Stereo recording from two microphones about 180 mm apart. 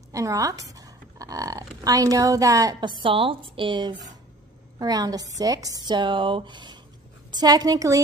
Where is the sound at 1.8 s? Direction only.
20° right (ahead or behind).